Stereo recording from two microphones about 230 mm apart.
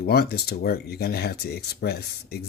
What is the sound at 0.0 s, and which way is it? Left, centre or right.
Speech, left.